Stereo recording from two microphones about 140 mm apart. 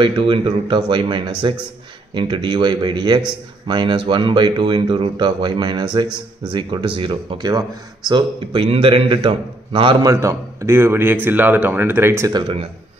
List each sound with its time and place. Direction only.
0.0 s speech: 35° right (ahead or behind)
10.0 s speech: 20° right (ahead or behind)
12.3 s speech: 30° right (ahead or behind)